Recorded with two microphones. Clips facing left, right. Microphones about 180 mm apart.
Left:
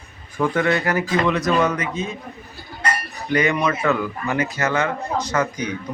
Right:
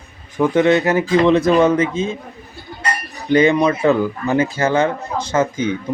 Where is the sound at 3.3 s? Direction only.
25° right (ahead or behind).